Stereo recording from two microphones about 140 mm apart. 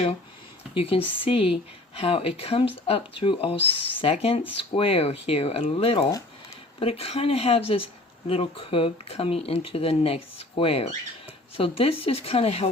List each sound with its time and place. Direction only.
0.7 s speech: 40° left (ahead or behind)